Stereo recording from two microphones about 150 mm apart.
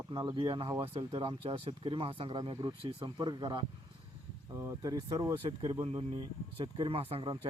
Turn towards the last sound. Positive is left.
turn(degrees=-35)  # may be behind; listen again after turning